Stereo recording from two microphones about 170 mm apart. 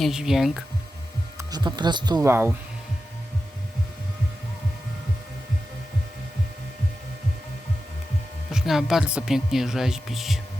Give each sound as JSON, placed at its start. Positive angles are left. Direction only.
{"t": 0.0, "sound": "a woman's voice", "side_deg": -5}
{"t": 1.4, "sound": "speech", "side_deg": -25}
{"t": 8.4, "sound": "a woman's voice", "side_deg": 0}